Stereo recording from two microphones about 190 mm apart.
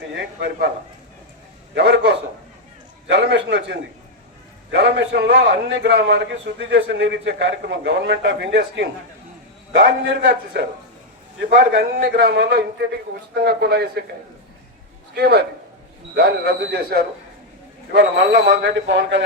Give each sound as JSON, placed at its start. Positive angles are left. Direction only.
{"t": 1.7, "sound": "a man's voice", "side_deg": -60}
{"t": 10.0, "sound": "a man's voice", "side_deg": -60}
{"t": 15.1, "sound": "a man's voice", "side_deg": -60}